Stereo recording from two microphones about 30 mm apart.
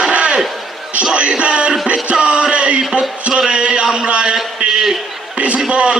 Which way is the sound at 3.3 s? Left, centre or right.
Right.